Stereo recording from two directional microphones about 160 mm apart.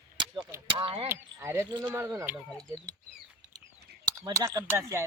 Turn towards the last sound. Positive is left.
turn(degrees=-15)  # may be behind; listen again after turning